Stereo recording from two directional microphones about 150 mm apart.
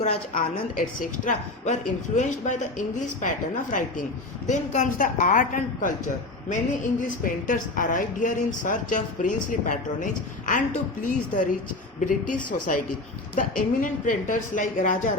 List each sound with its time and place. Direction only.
0.0 s a woman's voice: 65° left (ahead or behind)
7.0 s a woman's voice: 60° left (ahead or behind)